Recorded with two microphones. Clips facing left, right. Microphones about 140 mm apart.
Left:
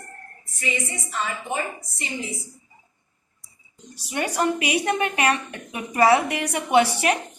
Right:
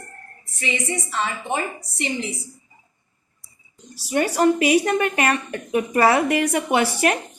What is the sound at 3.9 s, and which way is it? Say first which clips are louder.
A woman's voice: right 5 dB; 40° right (ahead or behind).